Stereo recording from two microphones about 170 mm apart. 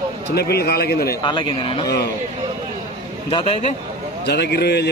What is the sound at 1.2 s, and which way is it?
Speech, 25° left (ahead or behind).